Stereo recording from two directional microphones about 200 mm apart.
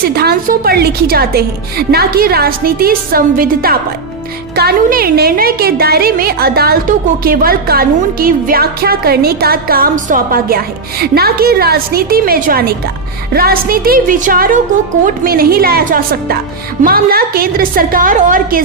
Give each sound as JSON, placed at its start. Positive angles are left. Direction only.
{"t": 0.1, "sound": "a woman's voice", "side_deg": -50}